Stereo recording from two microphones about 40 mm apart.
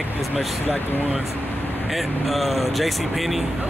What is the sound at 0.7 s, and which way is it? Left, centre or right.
Speech, left.